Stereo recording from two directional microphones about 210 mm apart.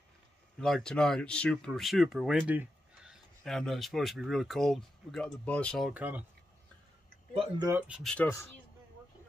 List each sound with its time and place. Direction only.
0.6 s speech: 5° left (ahead or behind)
7.3 s speech: 25° right (ahead or behind)
7.8 s speech: centre (ahead or behind)